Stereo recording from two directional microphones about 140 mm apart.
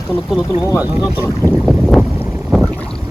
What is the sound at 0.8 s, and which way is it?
Speech, 10° right (ahead or behind).